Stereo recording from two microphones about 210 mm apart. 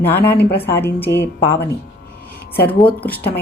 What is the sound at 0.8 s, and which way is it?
Speech, 10° left (ahead or behind).